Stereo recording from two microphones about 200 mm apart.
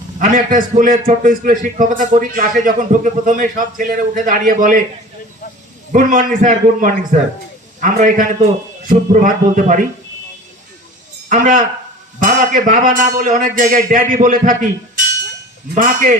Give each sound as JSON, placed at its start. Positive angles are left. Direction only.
{"t": 0.2, "sound": "a man's voice", "side_deg": -40}
{"t": 5.9, "sound": "a man's voice", "side_deg": -40}
{"t": 11.3, "sound": "a man's voice", "side_deg": -40}
{"t": 15.7, "sound": "a man's voice", "side_deg": -40}